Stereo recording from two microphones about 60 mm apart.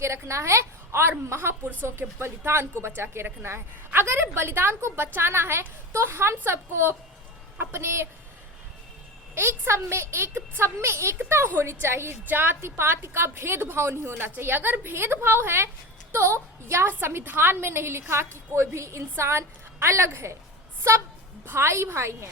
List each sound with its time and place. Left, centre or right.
0.0 s a woman's voice: right
9.3 s a woman's voice: right
21.4 s a woman's voice: right